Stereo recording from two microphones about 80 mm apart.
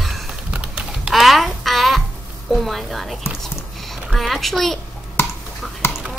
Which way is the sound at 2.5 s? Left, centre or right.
Centre.